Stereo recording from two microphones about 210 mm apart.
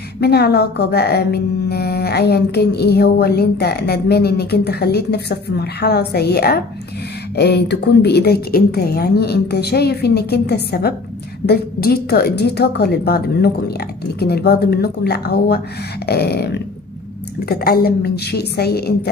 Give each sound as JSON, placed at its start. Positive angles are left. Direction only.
{"t": 0.2, "sound": "a woman's voice", "side_deg": 50}
{"t": 17.6, "sound": "a woman's voice", "side_deg": 45}